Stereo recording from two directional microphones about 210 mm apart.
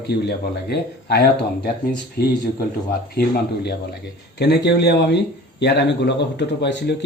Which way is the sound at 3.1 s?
50° left (ahead or behind).